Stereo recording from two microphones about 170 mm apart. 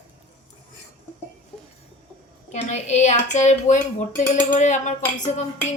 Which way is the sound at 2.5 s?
45° left (ahead or behind).